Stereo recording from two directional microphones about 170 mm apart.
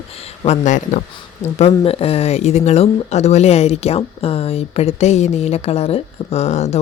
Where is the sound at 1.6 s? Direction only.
35° left (ahead or behind).